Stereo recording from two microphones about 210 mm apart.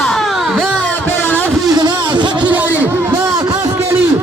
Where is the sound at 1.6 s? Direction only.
20° right (ahead or behind).